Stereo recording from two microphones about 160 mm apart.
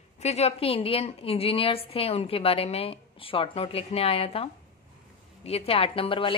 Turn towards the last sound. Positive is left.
turn(degrees=35)  # may be behind; listen again after turning